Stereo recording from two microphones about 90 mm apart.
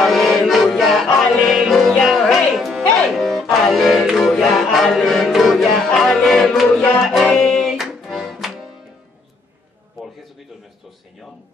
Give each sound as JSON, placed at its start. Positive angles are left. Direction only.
{"t": 0.0, "sound": "music", "side_deg": 0}